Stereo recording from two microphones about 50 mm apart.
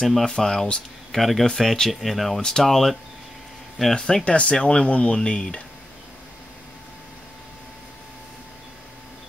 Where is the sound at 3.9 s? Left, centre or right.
Centre.